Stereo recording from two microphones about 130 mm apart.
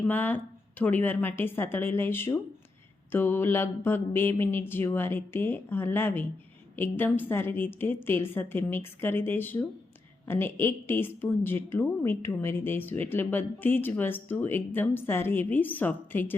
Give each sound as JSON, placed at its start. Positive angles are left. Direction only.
{"t": 0.1, "sound": "a woman's voice", "side_deg": 15}